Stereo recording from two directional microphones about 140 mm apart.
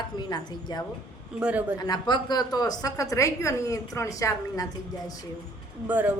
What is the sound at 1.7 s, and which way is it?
A woman's voice, 30° left (ahead or behind).